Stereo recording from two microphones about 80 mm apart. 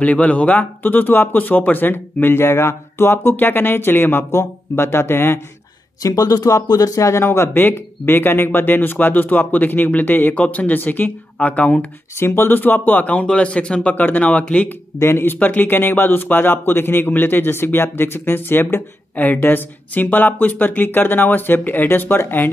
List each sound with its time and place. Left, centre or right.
0.0 s a man's voice: centre
6.0 s a man's voice: left; by 11.8 s centre
12.2 s a man's voice: left
15.0 s a man's voice: left